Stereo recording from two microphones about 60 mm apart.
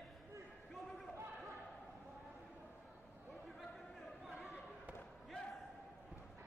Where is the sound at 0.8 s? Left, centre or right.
Centre.